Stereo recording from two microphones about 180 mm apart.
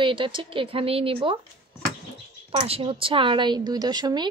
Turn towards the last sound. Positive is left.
turn(degrees=-20)  # may be behind; listen again after turning